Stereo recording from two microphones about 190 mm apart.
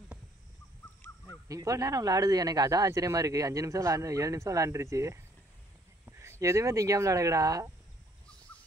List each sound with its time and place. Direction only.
1.0 s goose: 10° left (ahead or behind)
1.5 s speech: 15° right (ahead or behind)
6.0 s a sound: 15° right (ahead or behind)
6.4 s speech: 15° right (ahead or behind)